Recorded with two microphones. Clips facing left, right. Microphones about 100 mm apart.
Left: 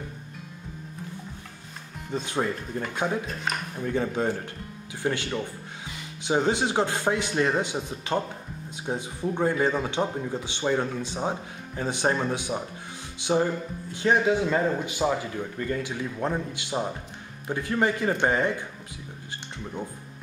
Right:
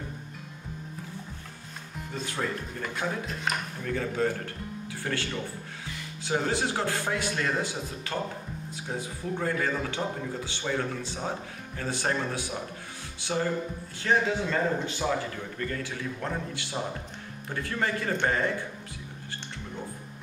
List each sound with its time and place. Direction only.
2.1 s speech: 20° left (ahead or behind)
3.8 s speech: 20° left (ahead or behind)